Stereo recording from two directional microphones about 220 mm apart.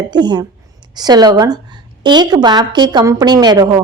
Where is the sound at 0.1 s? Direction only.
20° right (ahead or behind).